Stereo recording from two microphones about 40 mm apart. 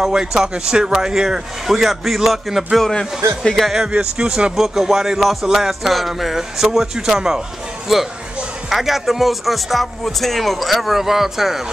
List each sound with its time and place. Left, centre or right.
0.1 s a man's voice: centre
2.9 s speech: centre
3.9 s a man's voice: centre
8.6 s speech: centre